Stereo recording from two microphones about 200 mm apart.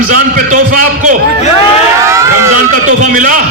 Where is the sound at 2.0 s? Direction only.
15° right (ahead or behind).